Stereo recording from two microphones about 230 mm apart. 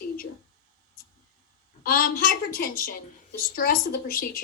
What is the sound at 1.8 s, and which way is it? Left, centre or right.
Speech, left.